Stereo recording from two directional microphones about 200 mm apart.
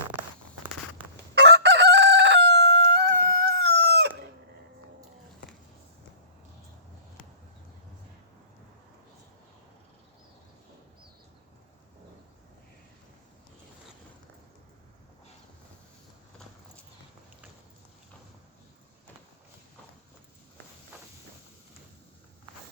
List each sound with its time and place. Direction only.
1.4 s chicken: 60° right (ahead or behind)